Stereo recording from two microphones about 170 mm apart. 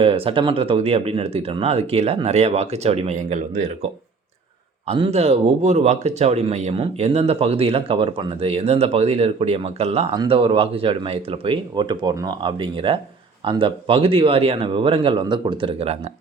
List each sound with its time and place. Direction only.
0.0 s speech: 35° right (ahead or behind)
4.9 s speech: 30° right (ahead or behind)